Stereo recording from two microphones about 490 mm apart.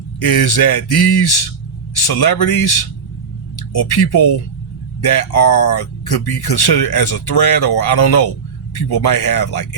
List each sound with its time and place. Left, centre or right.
0.2 s speech: left